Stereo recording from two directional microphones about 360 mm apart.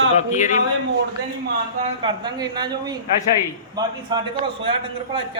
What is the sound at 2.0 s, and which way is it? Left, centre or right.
A man's voice, centre.